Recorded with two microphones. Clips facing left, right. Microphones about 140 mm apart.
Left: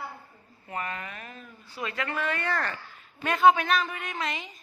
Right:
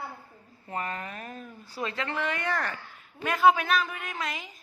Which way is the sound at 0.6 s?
35° right (ahead or behind).